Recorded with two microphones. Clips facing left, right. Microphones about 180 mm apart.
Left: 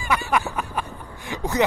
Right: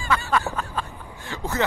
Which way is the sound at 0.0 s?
15° left (ahead or behind).